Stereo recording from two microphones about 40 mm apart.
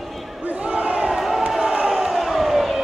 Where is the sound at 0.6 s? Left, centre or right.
Right.